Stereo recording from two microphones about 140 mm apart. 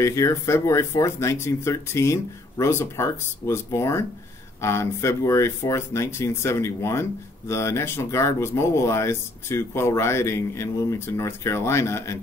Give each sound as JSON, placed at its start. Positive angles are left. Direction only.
{"t": 0.0, "sound": "speech", "side_deg": 20}